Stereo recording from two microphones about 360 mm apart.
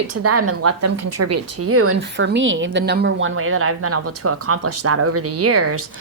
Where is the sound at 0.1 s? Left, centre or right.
Right.